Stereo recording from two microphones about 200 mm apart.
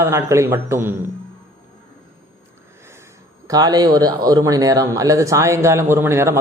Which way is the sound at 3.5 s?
20° right (ahead or behind).